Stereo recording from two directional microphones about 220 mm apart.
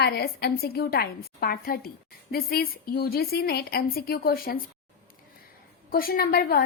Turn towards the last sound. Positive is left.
turn(degrees=45)  # may be behind; listen again after turning